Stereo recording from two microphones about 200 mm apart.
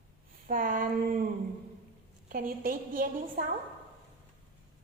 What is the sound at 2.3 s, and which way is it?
A woman's voice, 45° right (ahead or behind).